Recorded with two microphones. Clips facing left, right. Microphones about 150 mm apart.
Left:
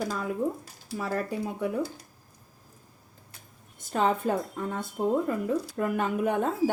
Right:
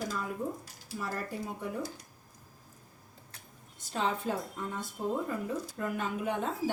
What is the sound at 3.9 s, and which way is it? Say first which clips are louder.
Speech: left 6 dB; 50° left (ahead or behind).